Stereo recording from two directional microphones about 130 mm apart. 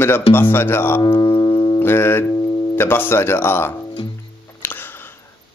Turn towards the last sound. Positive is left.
turn(degrees=15)  # may be behind; listen again after turning